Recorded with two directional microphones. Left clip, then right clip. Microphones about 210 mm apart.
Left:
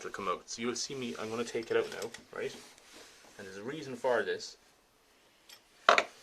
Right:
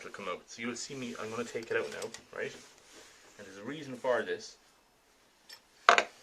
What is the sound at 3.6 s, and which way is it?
Speech, 45° left (ahead or behind).